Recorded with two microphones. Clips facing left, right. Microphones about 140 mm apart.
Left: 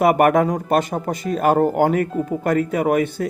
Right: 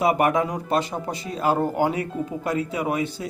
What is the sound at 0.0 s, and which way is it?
Speech, 55° left (ahead or behind).